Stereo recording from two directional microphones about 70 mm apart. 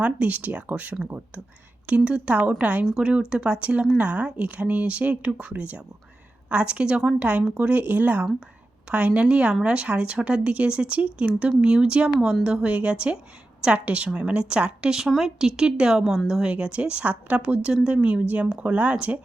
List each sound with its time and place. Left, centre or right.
0.0 s speech: centre